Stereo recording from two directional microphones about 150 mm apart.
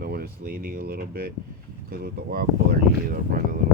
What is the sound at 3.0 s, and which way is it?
Speech, 70° right (ahead or behind).